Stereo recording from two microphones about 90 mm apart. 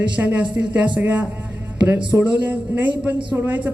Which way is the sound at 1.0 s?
15° right (ahead or behind).